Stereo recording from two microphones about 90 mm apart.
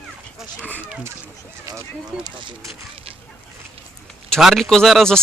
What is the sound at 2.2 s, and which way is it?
Speech, 65° right (ahead or behind).